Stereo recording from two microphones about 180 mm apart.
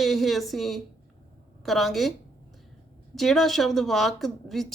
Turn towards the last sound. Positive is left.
turn(degrees=0)  # may be behind; listen again after turning